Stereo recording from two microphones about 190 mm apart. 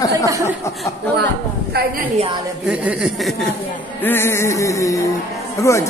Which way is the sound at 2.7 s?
5° right (ahead or behind).